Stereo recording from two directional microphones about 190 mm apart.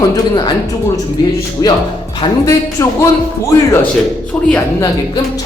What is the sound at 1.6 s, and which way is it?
Speech, 20° left (ahead or behind).